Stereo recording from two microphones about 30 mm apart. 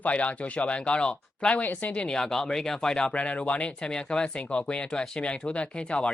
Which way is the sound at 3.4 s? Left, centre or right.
Left.